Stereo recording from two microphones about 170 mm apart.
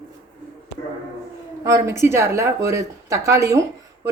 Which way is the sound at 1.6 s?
15° right (ahead or behind).